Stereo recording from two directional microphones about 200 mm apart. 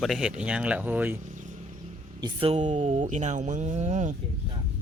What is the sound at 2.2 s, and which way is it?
Speech, 30° right (ahead or behind).